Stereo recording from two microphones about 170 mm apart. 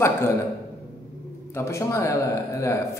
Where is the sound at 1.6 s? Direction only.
15° left (ahead or behind).